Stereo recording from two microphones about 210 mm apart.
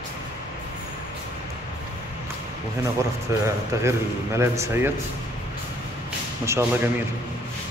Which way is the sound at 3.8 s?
15° right (ahead or behind).